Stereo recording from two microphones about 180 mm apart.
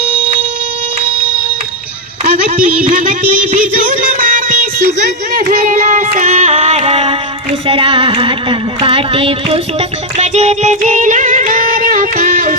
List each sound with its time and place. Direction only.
0.2 s fire alarm: 30° right (ahead or behind)
2.8 s music: 50° right (ahead or behind)
7.7 s a sound: 30° right (ahead or behind); by 12.5 s 45° right (ahead or behind)